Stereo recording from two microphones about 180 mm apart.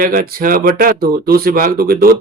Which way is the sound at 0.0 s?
55° right (ahead or behind).